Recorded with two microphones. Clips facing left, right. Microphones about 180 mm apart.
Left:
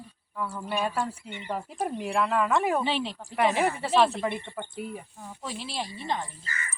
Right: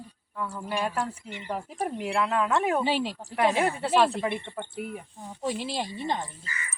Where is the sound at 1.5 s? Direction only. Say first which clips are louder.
Even; centre (ahead or behind).